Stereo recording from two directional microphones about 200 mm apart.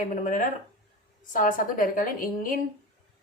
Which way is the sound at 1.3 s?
40° left (ahead or behind).